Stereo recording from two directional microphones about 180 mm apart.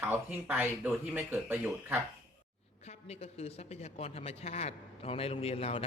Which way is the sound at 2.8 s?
35° left (ahead or behind).